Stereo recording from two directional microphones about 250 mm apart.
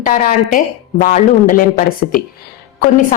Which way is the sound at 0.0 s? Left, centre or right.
Left.